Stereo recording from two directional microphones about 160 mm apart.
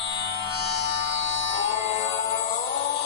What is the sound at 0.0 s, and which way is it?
Music, 30° left (ahead or behind).